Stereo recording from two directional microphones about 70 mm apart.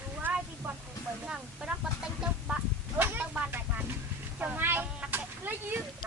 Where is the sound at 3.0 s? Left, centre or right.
Right.